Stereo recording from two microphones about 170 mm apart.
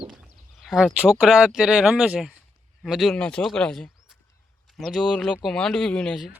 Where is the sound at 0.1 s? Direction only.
Centre (ahead or behind).